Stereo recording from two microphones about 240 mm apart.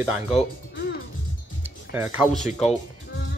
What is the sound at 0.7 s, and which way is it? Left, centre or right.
Music, left.